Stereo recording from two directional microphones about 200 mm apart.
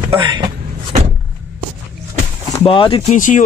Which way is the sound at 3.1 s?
40° left (ahead or behind).